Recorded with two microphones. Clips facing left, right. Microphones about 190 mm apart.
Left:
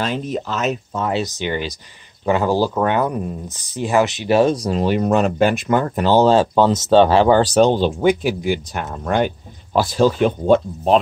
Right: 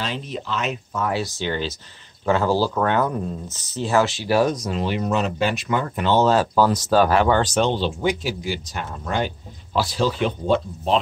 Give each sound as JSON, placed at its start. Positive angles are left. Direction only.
{"t": 0.0, "sound": "speech", "side_deg": 45}
{"t": 0.9, "sound": "speech", "side_deg": 25}